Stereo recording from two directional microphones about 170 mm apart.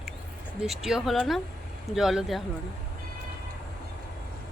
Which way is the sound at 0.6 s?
Centre (ahead or behind).